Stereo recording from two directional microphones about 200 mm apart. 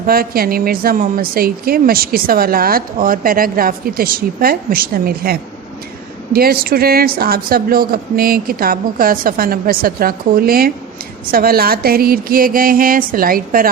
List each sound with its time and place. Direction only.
0.1 s speech: 50° right (ahead or behind)